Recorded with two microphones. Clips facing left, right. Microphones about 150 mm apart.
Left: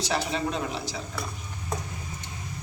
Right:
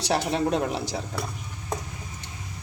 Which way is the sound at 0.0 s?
60° right (ahead or behind).